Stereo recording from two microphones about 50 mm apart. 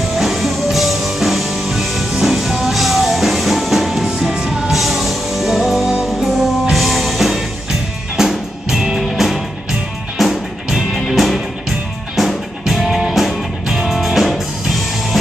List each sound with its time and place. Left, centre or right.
0.1 s music: centre